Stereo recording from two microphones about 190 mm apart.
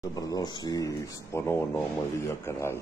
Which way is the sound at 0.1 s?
20° left (ahead or behind).